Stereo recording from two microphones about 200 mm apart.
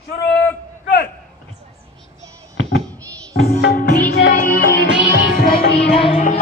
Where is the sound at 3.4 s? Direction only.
50° left (ahead or behind).